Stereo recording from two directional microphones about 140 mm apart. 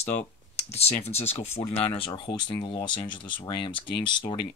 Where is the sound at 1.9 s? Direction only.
40° left (ahead or behind).